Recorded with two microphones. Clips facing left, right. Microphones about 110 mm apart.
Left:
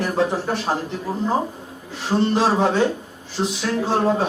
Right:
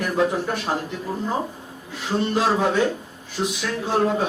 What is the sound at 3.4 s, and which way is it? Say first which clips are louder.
Speech: left 2 dB; 30° left (ahead or behind).